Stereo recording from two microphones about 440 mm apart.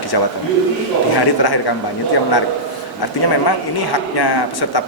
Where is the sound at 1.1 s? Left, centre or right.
Left.